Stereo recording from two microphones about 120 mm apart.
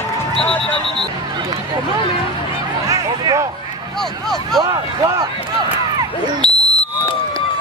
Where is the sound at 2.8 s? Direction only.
30° right (ahead or behind).